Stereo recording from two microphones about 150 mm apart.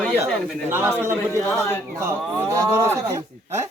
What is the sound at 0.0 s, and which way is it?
Speech, 5° left (ahead or behind).